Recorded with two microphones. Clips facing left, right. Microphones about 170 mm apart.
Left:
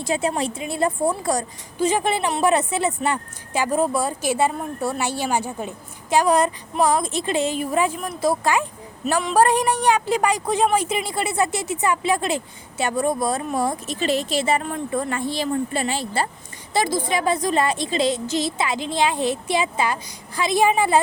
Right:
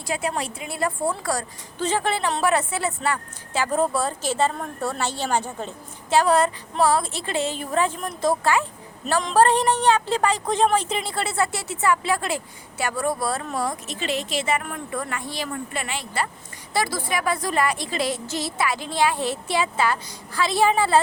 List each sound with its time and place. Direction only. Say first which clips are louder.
0.0 s a woman's voice: left 4 dB; 25° left (ahead or behind)
13.8 s a woman's voice: left 5 dB; 40° left (ahead or behind)
16.7 s a woman's voice: left 3 dB; 20° left (ahead or behind)